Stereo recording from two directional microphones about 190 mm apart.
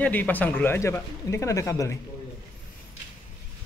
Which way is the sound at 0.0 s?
10° left (ahead or behind).